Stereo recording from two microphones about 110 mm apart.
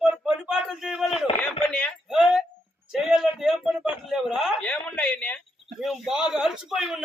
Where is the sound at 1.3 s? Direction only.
60° left (ahead or behind).